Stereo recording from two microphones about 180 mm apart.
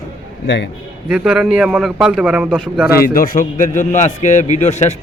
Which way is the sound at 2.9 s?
55° left (ahead or behind).